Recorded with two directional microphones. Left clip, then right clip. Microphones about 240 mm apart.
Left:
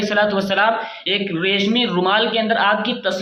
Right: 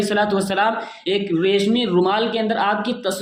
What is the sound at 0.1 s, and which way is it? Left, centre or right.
A man's voice, right.